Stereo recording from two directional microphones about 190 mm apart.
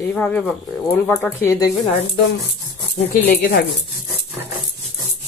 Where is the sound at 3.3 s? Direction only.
50° left (ahead or behind).